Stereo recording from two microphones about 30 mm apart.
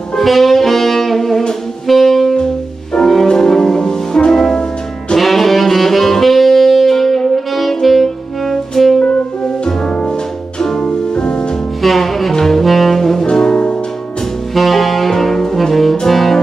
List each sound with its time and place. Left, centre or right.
0.2 s saxophone: centre
3.3 s music: centre
5.1 s saxophone: centre
10.8 s music: left
11.8 s music: centre
12.4 s saxophone: centre
13.3 s music: left
14.5 s saxophone: centre
16.1 s music: centre